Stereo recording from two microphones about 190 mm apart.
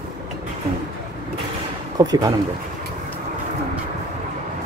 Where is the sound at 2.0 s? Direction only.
20° right (ahead or behind).